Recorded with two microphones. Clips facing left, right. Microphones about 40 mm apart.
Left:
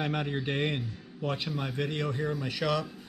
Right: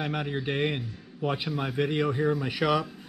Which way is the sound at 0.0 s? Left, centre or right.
Centre.